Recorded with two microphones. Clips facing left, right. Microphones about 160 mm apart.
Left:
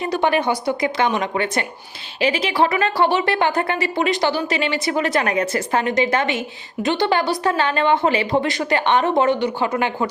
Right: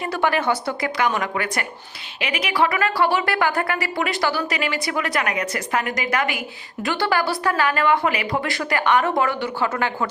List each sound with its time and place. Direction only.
0.0 s a woman's voice: 20° left (ahead or behind)